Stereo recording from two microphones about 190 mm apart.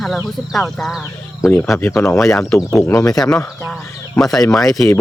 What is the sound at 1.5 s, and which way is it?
Speech, 10° left (ahead or behind).